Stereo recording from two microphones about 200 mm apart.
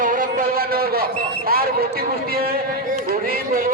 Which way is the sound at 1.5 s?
50° right (ahead or behind).